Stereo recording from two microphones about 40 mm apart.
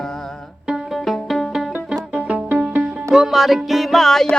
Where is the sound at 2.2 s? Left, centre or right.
Right.